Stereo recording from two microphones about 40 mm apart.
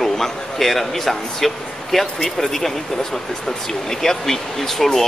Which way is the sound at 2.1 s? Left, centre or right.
Centre.